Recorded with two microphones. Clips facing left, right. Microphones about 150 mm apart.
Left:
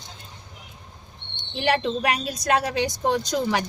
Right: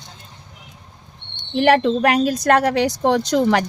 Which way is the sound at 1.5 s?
60° right (ahead or behind).